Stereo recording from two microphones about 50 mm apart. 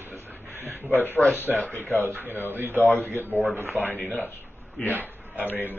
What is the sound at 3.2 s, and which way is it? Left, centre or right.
Speech, right.